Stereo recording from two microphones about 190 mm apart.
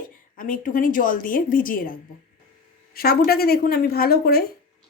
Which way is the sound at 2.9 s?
55° left (ahead or behind).